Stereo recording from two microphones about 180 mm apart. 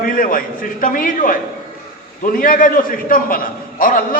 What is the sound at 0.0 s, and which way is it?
A man's voice, 50° left (ahead or behind).